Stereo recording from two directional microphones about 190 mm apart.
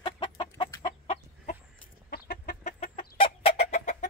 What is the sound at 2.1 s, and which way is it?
Chicken, 50° left (ahead or behind).